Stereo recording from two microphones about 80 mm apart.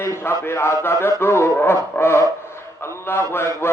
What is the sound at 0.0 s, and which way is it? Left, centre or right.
Mantra, left.